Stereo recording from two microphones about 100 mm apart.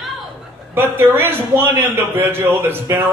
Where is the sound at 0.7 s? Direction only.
20° right (ahead or behind).